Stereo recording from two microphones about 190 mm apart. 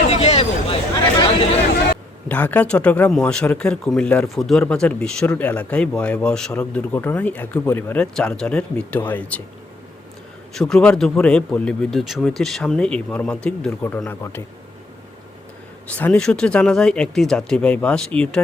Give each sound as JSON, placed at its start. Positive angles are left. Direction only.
{"t": 0.1, "sound": "a sound", "side_deg": 35}
{"t": 2.3, "sound": "a man's voice", "side_deg": 10}
{"t": 10.5, "sound": "speech", "side_deg": 5}
{"t": 15.9, "sound": "speech", "side_deg": 10}